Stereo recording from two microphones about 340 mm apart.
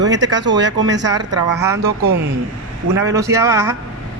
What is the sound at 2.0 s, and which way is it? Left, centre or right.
Speech, right.